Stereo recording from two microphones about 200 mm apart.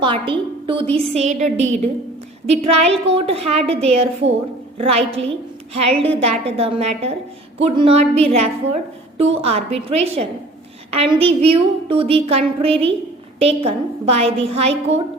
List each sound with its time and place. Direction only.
0.0 s a woman's voice: 25° right (ahead or behind)